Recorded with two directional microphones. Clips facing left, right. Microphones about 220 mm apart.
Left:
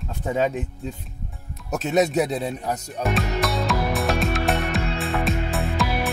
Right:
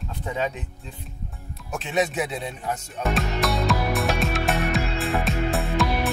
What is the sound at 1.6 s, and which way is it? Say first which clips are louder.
Speech: left 4 dB; 40° left (ahead or behind).